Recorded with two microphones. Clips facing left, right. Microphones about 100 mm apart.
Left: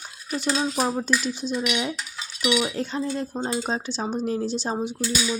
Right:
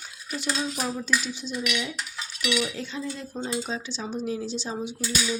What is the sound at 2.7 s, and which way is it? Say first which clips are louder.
Speech: left 6 dB; 45° left (ahead or behind).